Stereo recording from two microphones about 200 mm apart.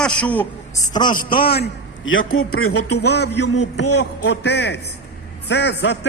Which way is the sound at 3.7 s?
60° left (ahead or behind).